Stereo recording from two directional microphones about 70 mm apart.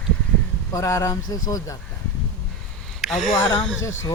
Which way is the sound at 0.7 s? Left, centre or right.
Left.